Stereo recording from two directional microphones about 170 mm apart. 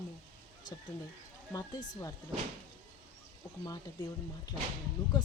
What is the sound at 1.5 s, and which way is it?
Speech, 20° left (ahead or behind).